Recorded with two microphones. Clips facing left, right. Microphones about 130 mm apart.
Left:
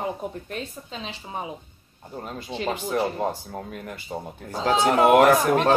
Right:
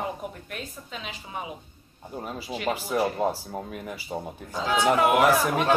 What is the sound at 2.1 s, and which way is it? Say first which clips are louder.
Speech: even; 5° right (ahead or behind).